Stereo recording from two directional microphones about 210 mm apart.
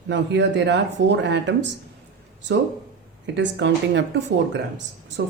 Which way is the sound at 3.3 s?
60° right (ahead or behind).